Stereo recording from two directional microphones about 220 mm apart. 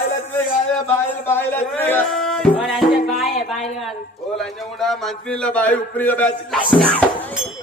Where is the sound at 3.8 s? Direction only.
Centre (ahead or behind).